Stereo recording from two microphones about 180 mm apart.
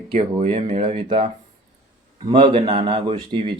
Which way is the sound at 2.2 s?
25° right (ahead or behind).